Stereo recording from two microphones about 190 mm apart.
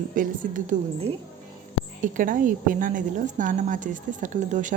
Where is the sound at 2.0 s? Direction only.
45° right (ahead or behind).